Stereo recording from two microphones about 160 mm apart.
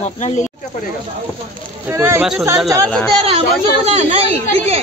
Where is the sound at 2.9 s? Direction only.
5° left (ahead or behind).